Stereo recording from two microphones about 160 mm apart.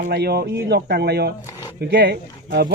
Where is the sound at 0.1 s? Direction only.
80° right.